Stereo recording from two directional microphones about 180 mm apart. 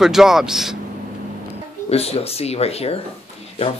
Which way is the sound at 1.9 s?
35° left (ahead or behind).